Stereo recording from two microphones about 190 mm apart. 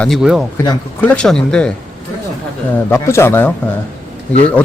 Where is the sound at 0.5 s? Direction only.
20° left (ahead or behind).